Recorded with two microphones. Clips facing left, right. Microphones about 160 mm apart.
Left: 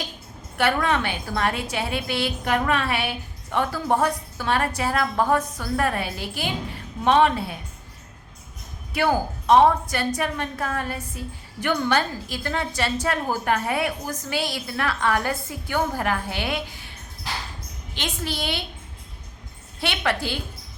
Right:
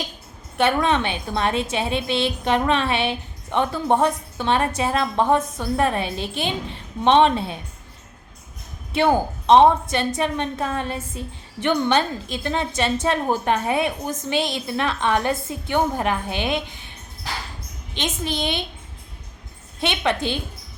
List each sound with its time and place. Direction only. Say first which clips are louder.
0.5 s a woman's voice: right 3 dB; 20° right (ahead or behind)
8.9 s a woman's voice: right 3 dB; 25° right (ahead or behind)
17.9 s a woman's voice: right 3 dB; 20° right (ahead or behind)
19.8 s a woman's voice: right 3 dB; 20° right (ahead or behind)